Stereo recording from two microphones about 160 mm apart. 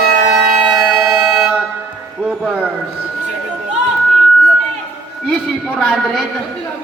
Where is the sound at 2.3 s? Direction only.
5° right (ahead or behind).